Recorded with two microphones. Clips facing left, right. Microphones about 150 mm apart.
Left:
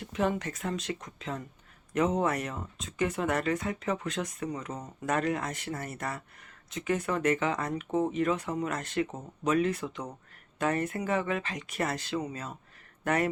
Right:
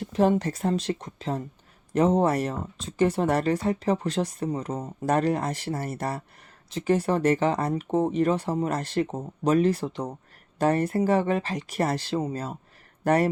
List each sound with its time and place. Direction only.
0.0 s speech: 35° right (ahead or behind)